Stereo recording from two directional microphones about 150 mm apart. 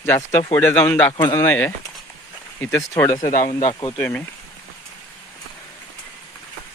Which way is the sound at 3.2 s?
60° left (ahead or behind).